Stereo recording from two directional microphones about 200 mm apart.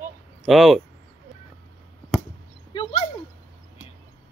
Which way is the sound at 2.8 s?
30° left (ahead or behind).